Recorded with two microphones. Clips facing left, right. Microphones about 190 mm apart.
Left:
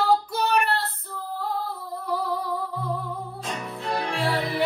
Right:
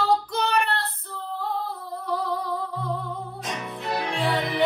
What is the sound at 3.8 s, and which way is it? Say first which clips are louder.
Music: even; 15° right (ahead or behind).